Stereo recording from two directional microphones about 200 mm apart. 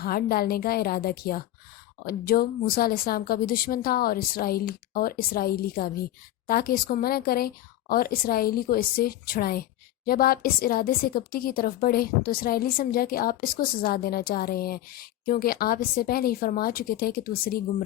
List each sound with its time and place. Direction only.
0.0 s a woman's voice: 50° left (ahead or behind)